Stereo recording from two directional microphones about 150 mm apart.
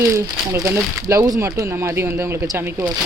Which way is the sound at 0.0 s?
20° right (ahead or behind).